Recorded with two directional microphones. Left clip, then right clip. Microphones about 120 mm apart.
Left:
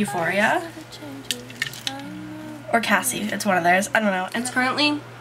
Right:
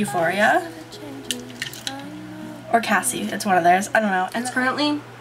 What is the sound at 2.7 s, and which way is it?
Speech, 5° left (ahead or behind).